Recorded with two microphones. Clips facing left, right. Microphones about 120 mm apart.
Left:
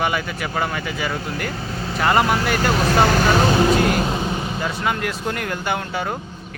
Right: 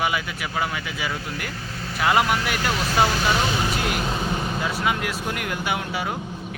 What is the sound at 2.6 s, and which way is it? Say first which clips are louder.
Speech: left 5 dB; 55° left (ahead or behind).